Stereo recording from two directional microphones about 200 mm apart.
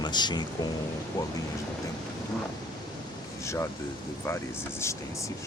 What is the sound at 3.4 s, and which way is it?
Speech, 15° left (ahead or behind).